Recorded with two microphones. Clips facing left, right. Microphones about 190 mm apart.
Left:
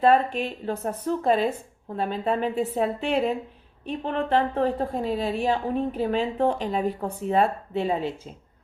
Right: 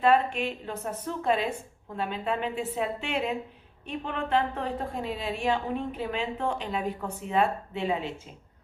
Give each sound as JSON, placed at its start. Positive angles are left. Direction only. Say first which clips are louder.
{"t": 0.0, "sound": "a woman's voice", "louder": "left 3 dB", "side_deg": 35}